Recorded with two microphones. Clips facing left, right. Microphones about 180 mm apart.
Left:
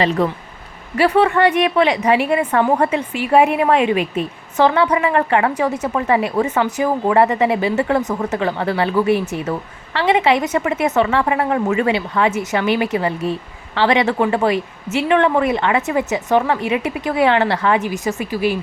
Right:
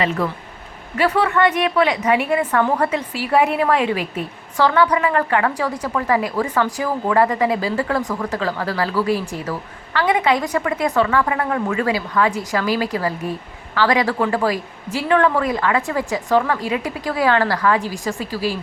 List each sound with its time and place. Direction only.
0.9 s a woman's voice: 30° left (ahead or behind)
1.5 s a woman's voice: 15° left (ahead or behind)
1.7 s a woman's voice: 25° left (ahead or behind)